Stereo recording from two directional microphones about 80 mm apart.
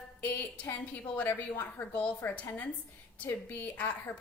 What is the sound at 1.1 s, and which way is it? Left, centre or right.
A woman's voice, left.